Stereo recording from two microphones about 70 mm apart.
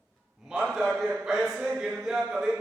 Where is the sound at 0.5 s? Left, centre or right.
Centre.